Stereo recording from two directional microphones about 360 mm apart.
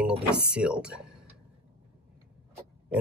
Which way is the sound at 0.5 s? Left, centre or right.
Centre.